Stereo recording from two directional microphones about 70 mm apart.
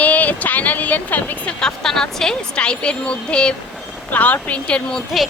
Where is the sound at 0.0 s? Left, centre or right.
Left.